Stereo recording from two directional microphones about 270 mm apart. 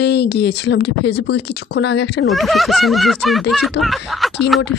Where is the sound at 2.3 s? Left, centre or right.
Centre.